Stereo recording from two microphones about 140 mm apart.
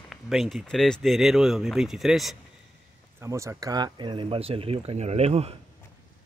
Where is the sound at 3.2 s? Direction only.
20° right (ahead or behind); by 5.5 s 50° right (ahead or behind).